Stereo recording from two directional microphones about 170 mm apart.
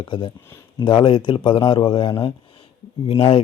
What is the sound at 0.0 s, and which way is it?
Speech, 25° left (ahead or behind).